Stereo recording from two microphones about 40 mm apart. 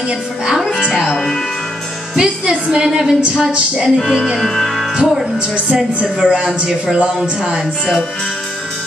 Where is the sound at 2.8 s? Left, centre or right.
Centre.